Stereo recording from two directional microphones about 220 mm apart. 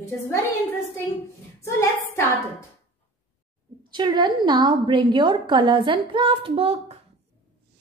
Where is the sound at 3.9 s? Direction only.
20° right (ahead or behind).